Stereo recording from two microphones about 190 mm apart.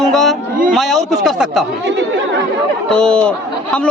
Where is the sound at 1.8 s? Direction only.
70° right (ahead or behind).